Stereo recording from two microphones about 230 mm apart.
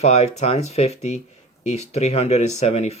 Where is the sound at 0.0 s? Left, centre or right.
Left.